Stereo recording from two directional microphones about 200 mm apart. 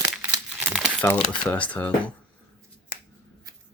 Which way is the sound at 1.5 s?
5° left (ahead or behind).